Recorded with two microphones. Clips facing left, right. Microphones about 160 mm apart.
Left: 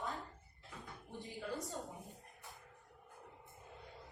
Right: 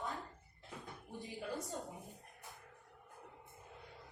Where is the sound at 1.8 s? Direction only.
Centre (ahead or behind).